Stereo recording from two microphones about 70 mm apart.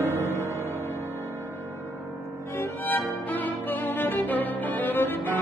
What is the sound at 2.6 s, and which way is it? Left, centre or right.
Violin, left.